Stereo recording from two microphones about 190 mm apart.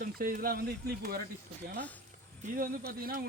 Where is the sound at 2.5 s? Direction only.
50° right (ahead or behind).